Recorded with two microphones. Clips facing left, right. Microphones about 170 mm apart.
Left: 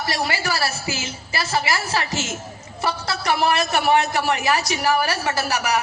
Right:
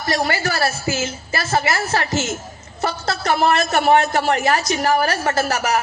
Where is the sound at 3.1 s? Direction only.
50° right (ahead or behind).